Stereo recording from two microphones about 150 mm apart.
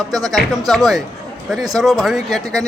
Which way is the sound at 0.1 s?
25° right (ahead or behind).